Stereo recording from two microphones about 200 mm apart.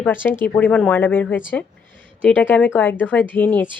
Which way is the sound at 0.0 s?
10° left (ahead or behind).